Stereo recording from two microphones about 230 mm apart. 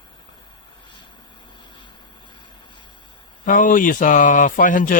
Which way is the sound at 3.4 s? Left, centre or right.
Left.